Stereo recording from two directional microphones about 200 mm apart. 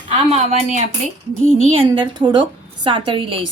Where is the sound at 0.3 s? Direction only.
35° right (ahead or behind).